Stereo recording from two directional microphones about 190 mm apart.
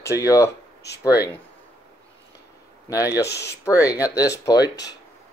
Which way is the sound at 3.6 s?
15° left (ahead or behind).